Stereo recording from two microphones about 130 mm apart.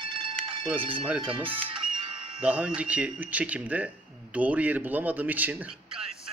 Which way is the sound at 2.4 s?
10° right (ahead or behind).